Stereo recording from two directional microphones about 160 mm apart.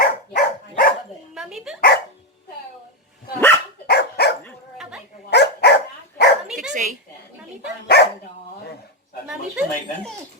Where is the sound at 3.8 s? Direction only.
85° left.